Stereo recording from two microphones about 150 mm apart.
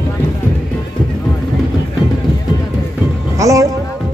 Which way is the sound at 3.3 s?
20° right (ahead or behind).